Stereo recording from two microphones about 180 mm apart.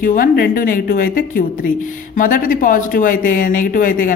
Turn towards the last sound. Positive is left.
turn(degrees=50)  # may be behind; listen again after turning